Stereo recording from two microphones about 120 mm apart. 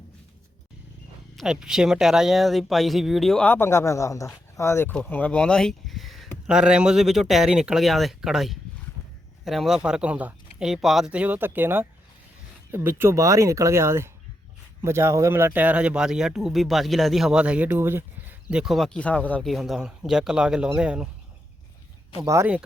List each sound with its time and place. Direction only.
1.4 s speech: 5° right (ahead or behind)
3.4 s speech: 20° left (ahead or behind)
4.9 s speech: 10° left (ahead or behind); by 18.3 s 20° right (ahead or behind)
18.5 s speech: centre (ahead or behind)
18.9 s speech: 10° left (ahead or behind)
19.5 s speech: centre (ahead or behind)
22.2 s speech: 25° right (ahead or behind)